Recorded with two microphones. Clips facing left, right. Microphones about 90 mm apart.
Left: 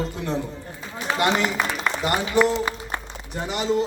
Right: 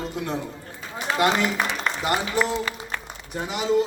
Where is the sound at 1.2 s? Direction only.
5° right (ahead or behind).